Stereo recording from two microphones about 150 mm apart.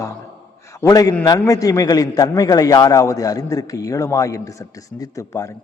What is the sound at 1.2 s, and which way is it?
A man's voice, 25° left (ahead or behind).